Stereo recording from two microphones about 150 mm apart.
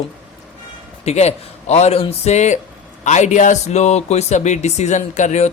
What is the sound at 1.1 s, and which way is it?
Speech, 45° left (ahead or behind).